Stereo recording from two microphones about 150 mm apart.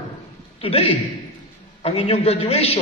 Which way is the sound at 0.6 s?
40° left (ahead or behind).